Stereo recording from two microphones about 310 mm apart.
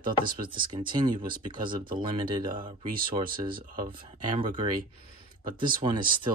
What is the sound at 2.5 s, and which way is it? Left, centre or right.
Speech, right.